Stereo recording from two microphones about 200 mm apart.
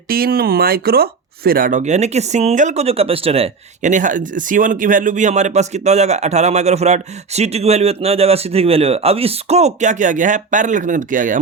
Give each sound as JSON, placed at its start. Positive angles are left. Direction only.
{"t": 0.1, "sound": "speech", "side_deg": -50}